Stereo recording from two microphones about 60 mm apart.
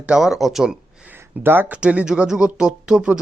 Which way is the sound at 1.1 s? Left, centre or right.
Right.